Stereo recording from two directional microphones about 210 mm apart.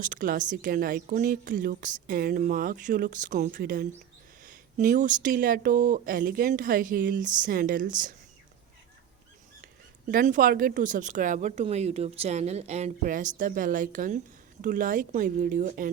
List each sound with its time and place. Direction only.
0.0 s speech: 40° right (ahead or behind)
10.1 s speech: 40° right (ahead or behind)